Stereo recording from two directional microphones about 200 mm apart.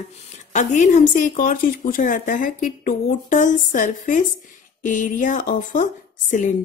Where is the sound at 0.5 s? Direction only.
35° left (ahead or behind).